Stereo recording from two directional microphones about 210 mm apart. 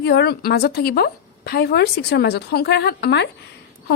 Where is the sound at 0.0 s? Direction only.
50° left (ahead or behind).